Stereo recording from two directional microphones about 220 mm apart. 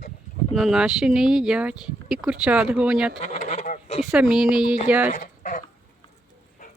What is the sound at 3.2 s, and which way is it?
Goose, 30° left (ahead or behind).